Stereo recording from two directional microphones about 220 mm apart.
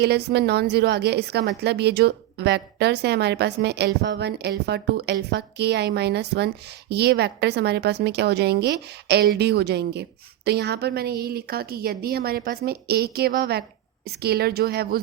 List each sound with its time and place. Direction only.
0.3 s a woman's voice: 50° right (ahead or behind)